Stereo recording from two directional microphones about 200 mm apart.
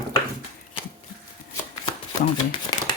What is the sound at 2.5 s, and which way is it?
Shuffling cards, 20° left (ahead or behind).